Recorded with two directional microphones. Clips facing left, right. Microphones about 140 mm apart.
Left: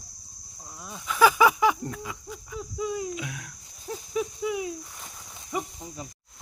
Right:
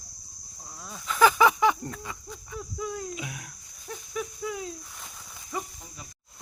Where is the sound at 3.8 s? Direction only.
30° left (ahead or behind); by 5.1 s 5° left (ahead or behind).